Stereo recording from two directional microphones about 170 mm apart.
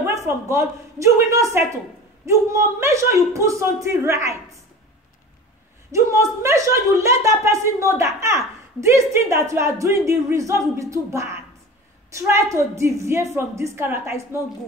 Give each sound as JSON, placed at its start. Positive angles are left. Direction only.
{"t": 0.0, "sound": "speech", "side_deg": -15}
{"t": 5.9, "sound": "speech", "side_deg": -15}